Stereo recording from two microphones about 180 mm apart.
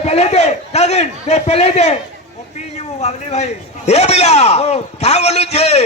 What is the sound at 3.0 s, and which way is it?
A man's voice, 40° left (ahead or behind).